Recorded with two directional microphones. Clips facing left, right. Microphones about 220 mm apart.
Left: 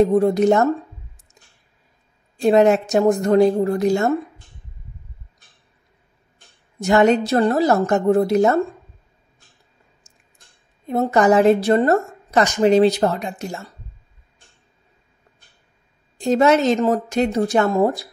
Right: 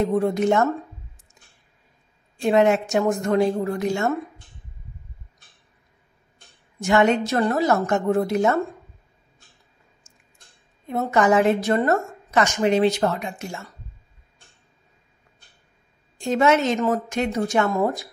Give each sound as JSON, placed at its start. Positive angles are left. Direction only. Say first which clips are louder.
{"t": 0.0, "sound": "a woman's voice", "louder": "left 5 dB", "side_deg": 35}
{"t": 2.4, "sound": "a woman's voice", "louder": "left 4 dB", "side_deg": 35}
{"t": 6.8, "sound": "a woman's voice", "louder": "left 3 dB", "side_deg": 35}
{"t": 10.9, "sound": "a woman's voice", "louder": "left 4 dB", "side_deg": 35}
{"t": 16.2, "sound": "a woman's voice", "louder": "left 4 dB", "side_deg": 35}